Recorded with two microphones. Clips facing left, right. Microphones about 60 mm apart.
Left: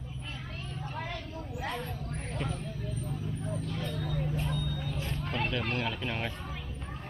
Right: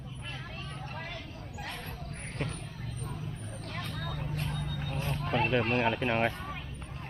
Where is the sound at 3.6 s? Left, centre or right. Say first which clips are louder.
Left 3 dB; right.